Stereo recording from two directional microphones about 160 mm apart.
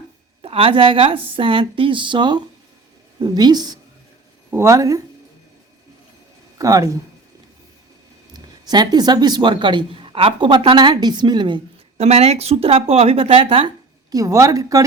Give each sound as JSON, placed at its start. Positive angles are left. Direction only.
{"t": 0.4, "sound": "a woman's voice", "side_deg": -35}
{"t": 6.6, "sound": "a woman's voice", "side_deg": -20}
{"t": 8.3, "sound": "a woman's voice", "side_deg": -25}